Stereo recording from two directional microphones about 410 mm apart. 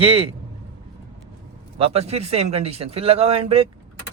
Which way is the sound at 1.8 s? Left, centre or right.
Centre.